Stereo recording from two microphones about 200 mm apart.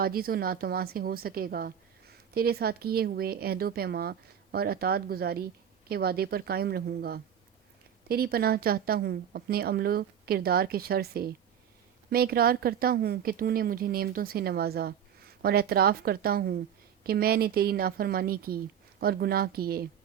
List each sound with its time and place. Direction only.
0.0 s a woman's voice: 50° right (ahead or behind)